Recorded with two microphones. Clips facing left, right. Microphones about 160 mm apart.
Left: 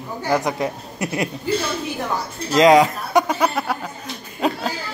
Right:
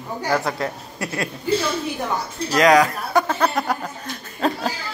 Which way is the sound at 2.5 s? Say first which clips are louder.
Left 3 dB; 25° left (ahead or behind).